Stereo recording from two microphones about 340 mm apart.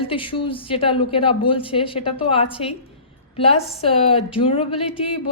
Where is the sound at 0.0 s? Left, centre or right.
Centre.